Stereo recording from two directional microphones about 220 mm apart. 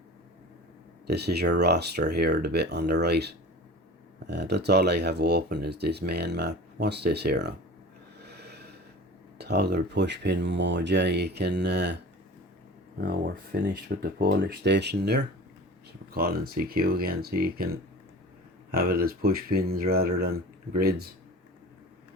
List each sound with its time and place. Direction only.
1.0 s speech: 45° right (ahead or behind)
8.2 s snort: 50° right (ahead or behind)
9.4 s speech: 50° right (ahead or behind)
13.0 s speech: 50° right (ahead or behind)